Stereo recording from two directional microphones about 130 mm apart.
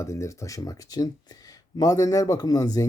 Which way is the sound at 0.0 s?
25° left (ahead or behind).